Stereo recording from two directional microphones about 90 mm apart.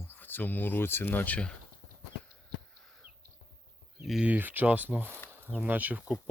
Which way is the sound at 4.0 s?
5° right (ahead or behind).